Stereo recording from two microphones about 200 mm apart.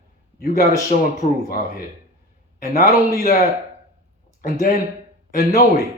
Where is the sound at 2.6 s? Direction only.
50° left (ahead or behind).